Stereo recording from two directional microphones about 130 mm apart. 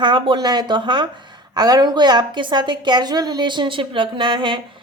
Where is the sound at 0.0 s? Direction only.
40° right (ahead or behind).